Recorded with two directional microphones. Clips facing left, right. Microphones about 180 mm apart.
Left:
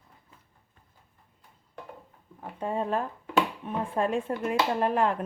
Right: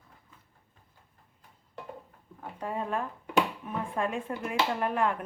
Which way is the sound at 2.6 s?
30° left (ahead or behind).